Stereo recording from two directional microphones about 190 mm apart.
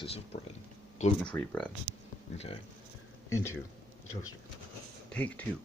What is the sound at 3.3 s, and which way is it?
Speech, 15° left (ahead or behind).